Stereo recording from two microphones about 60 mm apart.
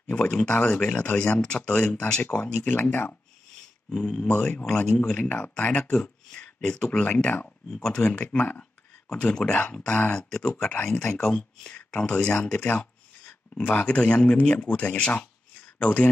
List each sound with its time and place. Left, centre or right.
0.0 s speech: centre
3.9 s speech: centre
12.6 s speech: left